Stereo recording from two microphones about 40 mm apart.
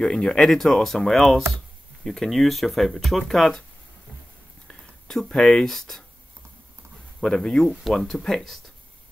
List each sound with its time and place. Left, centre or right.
0.0 s speech: left
0.5 s speech: centre
4.6 s a sound: centre
5.6 s speech: centre
7.2 s speech: centre